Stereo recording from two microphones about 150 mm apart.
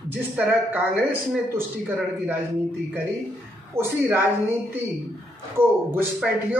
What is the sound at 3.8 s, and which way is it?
Speech, 15° right (ahead or behind).